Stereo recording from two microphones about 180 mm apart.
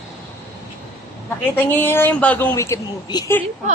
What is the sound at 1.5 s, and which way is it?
A woman's voice, 10° left (ahead or behind).